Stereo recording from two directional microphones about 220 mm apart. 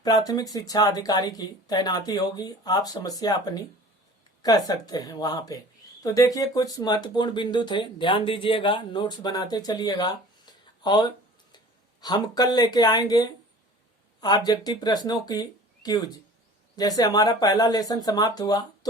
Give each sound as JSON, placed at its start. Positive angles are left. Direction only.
{"t": 0.0, "sound": "speech", "side_deg": 15}